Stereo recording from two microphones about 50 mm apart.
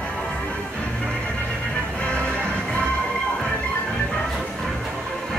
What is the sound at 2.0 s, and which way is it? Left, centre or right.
Music, left.